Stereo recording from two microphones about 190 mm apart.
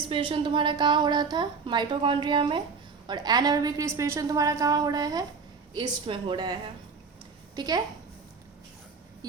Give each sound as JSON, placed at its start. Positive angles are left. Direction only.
{"t": 0.1, "sound": "a woman's voice", "side_deg": -25}